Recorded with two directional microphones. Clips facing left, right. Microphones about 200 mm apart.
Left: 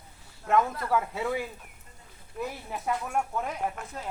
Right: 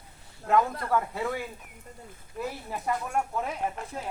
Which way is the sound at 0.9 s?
5° left (ahead or behind).